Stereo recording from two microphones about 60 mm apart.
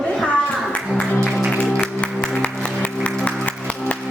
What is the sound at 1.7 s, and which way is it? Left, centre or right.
Music, left.